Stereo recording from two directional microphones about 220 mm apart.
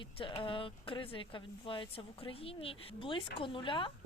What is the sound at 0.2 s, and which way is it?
Speech, 25° left (ahead or behind).